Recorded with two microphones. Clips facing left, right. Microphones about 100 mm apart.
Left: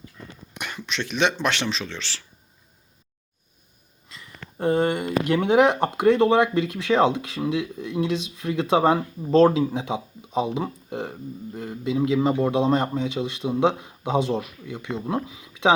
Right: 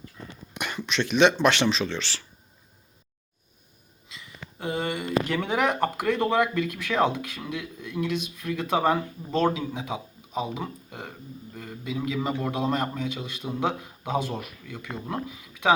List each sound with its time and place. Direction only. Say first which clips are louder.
0.5 s speech: right 2 dB; 5° right (ahead or behind)
4.5 s speech: left 8 dB; 45° left (ahead or behind)
5.3 s speech: left 11 dB; 20° left (ahead or behind)